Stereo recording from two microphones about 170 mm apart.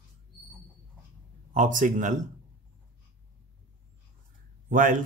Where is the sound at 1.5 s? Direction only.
50° right (ahead or behind).